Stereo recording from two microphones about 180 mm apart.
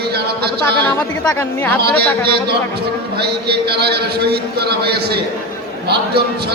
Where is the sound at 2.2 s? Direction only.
60° right (ahead or behind).